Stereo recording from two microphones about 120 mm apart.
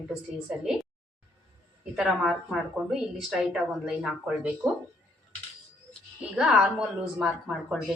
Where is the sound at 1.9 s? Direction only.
5° right (ahead or behind).